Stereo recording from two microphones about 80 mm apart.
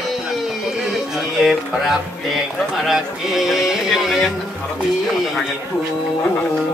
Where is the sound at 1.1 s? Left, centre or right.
Centre.